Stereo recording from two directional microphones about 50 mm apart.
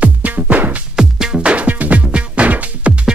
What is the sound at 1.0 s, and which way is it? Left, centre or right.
Music, centre.